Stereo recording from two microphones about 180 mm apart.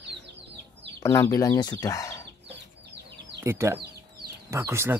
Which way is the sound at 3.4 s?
15° right (ahead or behind).